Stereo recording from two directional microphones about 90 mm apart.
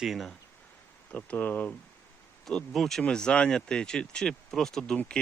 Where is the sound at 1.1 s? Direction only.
15° left (ahead or behind).